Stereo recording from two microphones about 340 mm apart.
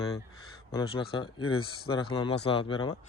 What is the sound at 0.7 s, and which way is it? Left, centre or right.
A man's voice, centre.